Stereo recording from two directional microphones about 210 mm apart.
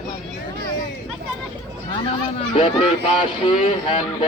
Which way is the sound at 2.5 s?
25° left (ahead or behind).